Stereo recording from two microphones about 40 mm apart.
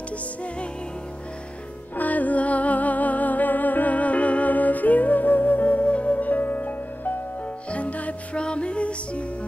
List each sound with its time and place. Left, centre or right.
2.0 s music: left